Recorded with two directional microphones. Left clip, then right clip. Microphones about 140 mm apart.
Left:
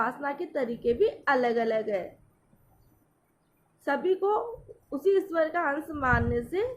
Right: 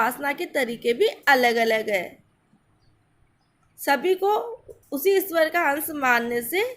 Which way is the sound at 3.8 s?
20° right (ahead or behind).